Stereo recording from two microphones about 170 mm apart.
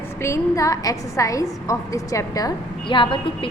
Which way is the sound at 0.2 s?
15° left (ahead or behind).